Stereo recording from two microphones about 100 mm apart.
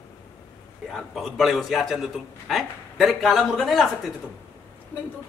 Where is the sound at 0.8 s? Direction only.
Centre (ahead or behind).